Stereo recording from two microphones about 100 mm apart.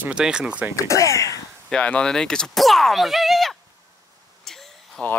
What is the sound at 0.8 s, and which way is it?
Speech, 30° left (ahead or behind).